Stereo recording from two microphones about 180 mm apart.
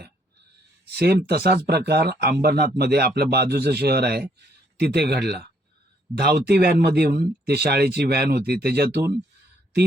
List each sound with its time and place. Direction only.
0.9 s speech: 65° right (ahead or behind)